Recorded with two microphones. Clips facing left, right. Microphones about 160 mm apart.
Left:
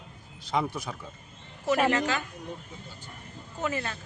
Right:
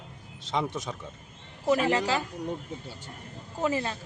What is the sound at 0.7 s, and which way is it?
A man's voice, 20° right (ahead or behind).